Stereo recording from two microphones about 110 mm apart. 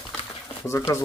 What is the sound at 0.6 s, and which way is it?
Speech, 25° left (ahead or behind).